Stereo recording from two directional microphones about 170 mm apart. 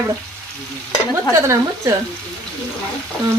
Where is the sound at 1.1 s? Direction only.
15° right (ahead or behind).